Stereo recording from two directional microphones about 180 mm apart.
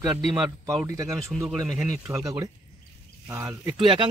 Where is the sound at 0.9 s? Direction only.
15° right (ahead or behind).